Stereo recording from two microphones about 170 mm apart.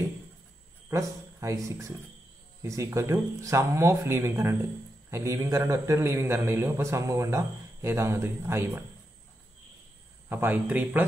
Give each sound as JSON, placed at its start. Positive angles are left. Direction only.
{"t": 0.8, "sound": "a man's voice", "side_deg": -20}
{"t": 10.3, "sound": "a man's voice", "side_deg": -10}